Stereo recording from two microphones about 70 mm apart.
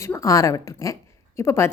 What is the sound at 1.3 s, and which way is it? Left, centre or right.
Speech, left.